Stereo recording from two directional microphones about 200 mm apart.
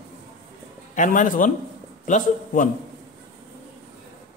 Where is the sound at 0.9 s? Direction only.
40° left (ahead or behind).